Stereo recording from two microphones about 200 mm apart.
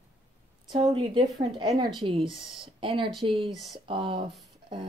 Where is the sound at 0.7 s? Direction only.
25° right (ahead or behind).